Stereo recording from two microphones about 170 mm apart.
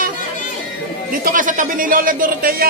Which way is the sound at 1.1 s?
55° right (ahead or behind).